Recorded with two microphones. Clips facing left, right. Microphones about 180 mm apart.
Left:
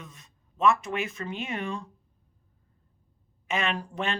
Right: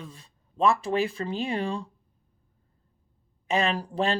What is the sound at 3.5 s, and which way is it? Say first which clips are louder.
Speech: right 4 dB; 35° right (ahead or behind).